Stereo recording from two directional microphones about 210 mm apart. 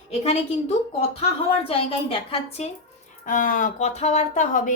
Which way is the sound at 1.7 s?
25° left (ahead or behind).